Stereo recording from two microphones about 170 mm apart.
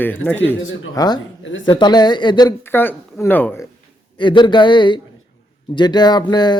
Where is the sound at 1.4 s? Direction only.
90° left.